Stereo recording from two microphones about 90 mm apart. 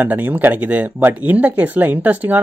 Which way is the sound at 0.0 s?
20° right (ahead or behind).